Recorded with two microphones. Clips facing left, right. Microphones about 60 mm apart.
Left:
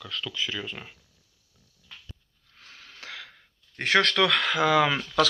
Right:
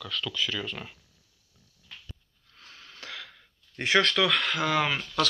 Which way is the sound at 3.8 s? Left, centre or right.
Left.